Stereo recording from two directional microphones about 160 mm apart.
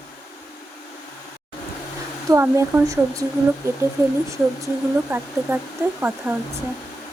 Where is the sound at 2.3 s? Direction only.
15° right (ahead or behind).